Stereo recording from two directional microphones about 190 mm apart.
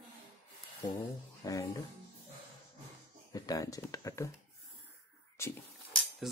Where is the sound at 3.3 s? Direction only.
20° left (ahead or behind).